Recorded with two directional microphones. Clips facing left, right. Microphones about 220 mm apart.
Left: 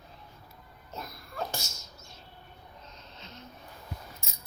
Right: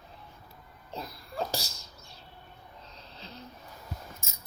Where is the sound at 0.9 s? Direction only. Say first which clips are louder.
Right 3 dB; 30° right (ahead or behind).